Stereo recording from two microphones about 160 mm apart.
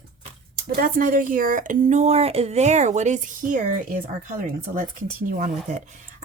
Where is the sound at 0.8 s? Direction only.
65° right (ahead or behind).